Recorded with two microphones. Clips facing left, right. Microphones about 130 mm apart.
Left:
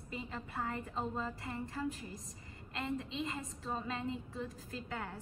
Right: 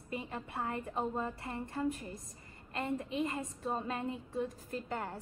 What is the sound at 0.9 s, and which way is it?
Speech, 20° right (ahead or behind).